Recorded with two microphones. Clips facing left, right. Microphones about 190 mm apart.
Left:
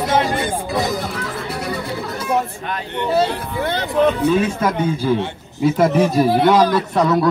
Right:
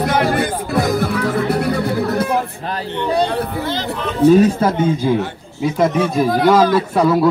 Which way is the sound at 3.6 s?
60° left (ahead or behind).